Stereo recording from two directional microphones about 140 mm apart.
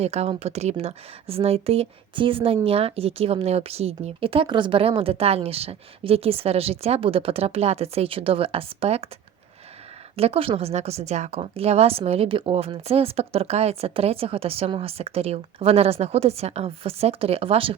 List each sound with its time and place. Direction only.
0.0 s a woman's voice: 50° right (ahead or behind)
10.2 s a woman's voice: 45° right (ahead or behind)